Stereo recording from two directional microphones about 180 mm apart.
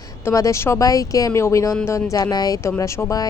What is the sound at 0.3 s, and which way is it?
Speech, 15° left (ahead or behind).